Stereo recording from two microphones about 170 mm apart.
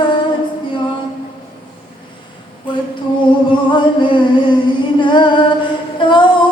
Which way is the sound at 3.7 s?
30° left (ahead or behind).